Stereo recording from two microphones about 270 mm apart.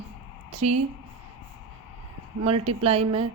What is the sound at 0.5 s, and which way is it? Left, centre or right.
Speech, right.